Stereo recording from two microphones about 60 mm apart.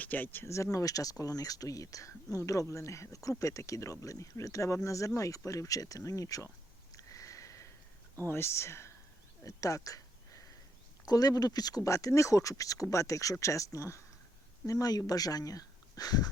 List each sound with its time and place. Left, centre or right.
0.0 s speech: left
0.5 s speech: left
6.9 s a sound: left
8.3 s speech: left
9.4 s a sound: left
11.0 s speech: left
14.7 s speech: left